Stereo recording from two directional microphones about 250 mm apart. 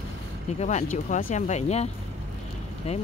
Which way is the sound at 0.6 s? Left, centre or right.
Left.